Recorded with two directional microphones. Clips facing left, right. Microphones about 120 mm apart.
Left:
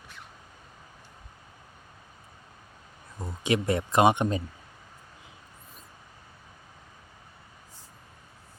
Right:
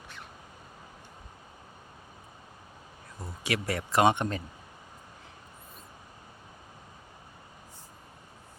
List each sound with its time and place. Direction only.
3.2 s speech: 20° left (ahead or behind)